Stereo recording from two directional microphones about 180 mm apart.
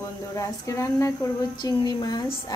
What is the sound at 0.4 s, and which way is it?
A woman's voice, 15° left (ahead or behind).